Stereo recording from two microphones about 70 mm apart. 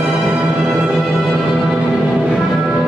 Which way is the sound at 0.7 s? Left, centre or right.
Centre.